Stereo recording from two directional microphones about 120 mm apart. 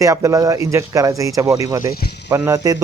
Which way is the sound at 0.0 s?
25° right (ahead or behind).